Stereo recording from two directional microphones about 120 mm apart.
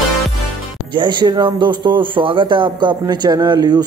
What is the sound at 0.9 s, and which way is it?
Speech, 40° right (ahead or behind).